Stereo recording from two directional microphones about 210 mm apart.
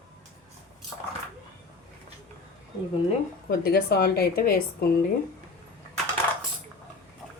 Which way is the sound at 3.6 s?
45° left (ahead or behind).